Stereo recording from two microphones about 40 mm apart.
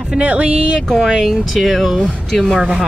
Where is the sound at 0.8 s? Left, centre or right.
Centre.